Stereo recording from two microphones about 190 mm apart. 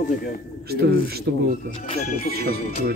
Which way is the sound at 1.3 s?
55° right (ahead or behind).